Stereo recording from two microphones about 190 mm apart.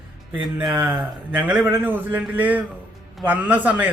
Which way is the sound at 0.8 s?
10° right (ahead or behind).